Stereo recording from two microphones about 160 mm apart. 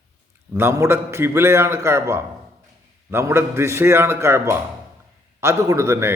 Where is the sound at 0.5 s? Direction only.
15° right (ahead or behind).